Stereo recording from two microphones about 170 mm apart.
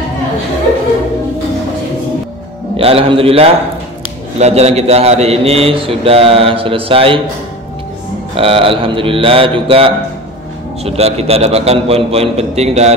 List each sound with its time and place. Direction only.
2.8 s a man's voice: 35° right (ahead or behind)
8.4 s a man's voice: 35° right (ahead or behind)